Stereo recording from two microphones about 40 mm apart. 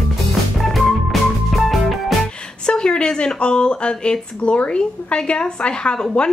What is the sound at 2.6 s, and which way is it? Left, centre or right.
A woman's voice, left.